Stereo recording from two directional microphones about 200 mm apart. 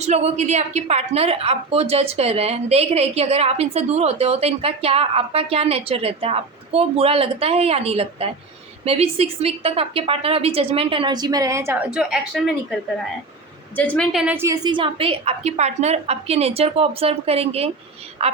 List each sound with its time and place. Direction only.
0.0 s a woman's voice: 35° right (ahead or behind); by 12.5 s centre (ahead or behind)
13.7 s a woman's voice: 5° left (ahead or behind); by 18.3 s 30° right (ahead or behind)